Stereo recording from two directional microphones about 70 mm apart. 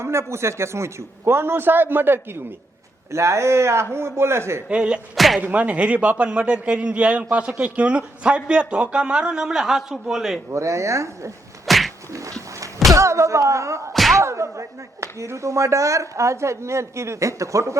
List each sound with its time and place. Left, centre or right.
0.0 s a man's voice: right
3.1 s a man's voice: right
4.7 s a man's voice: centre
5.1 s speech: centre
5.4 s a man's voice: right; by 10.4 s centre
10.5 s speech: right
11.6 s a sound: centre
12.1 s dog: right
12.9 s speech: right
13.9 s a sound: centre
14.2 s speech: right